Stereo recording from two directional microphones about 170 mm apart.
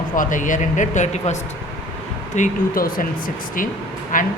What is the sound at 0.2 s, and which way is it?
Speech, 50° left (ahead or behind).